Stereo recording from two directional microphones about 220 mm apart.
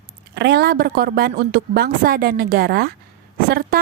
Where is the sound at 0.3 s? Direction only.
50° right (ahead or behind).